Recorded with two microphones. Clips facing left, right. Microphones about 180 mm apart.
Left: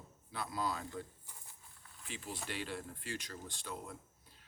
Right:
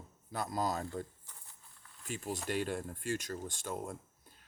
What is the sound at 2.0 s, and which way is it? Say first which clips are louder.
A man's voice: right 6 dB; 45° right (ahead or behind).